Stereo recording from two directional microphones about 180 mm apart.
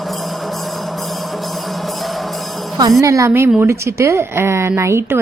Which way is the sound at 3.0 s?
15° right (ahead or behind).